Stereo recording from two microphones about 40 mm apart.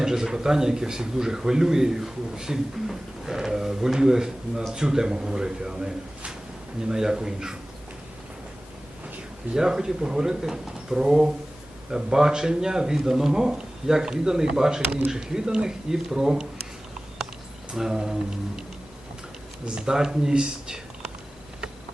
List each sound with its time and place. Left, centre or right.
0.0 s a man's voice: centre
9.6 s a man's voice: centre
17.7 s a man's voice: centre
19.6 s speech: right